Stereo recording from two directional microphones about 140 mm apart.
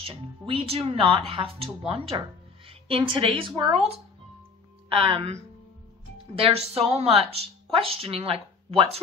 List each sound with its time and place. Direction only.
0.0 s a woman's voice: 40° right (ahead or behind)